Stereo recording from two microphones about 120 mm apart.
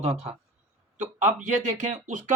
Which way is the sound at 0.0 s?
65° right (ahead or behind).